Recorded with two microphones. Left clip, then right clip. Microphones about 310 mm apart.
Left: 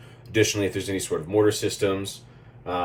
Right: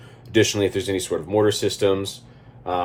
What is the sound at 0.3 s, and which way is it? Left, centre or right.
Speech, centre.